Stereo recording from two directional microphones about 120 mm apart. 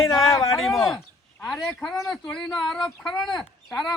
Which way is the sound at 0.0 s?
25° left (ahead or behind).